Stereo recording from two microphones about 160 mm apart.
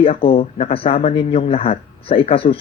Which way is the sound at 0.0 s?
35° left (ahead or behind).